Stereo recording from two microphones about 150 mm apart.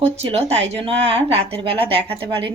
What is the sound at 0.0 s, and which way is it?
Speech, 45° right (ahead or behind).